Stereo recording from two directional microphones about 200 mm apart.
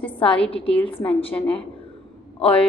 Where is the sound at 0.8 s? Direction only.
25° left (ahead or behind).